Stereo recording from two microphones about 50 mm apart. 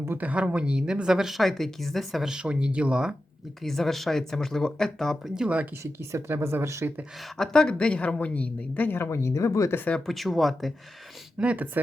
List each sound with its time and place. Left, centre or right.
0.2 s speech: right; by 2.2 s centre
2.4 s speech: right
3.6 s speech: centre
5.4 s speech: centre
5.8 s speech: right
6.3 s speech: right
7.3 s a woman's voice: centre; by 9.0 s left
9.0 s speech: left
10.1 s speech: centre
11.3 s speech: right